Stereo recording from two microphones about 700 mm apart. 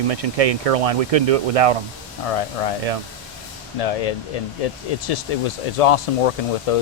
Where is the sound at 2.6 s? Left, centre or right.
Left.